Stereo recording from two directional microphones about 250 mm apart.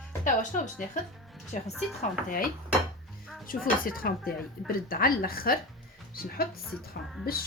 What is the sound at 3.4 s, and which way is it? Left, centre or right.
A woman's voice, left.